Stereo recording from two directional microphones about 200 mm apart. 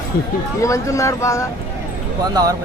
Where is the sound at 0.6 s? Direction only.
15° left (ahead or behind).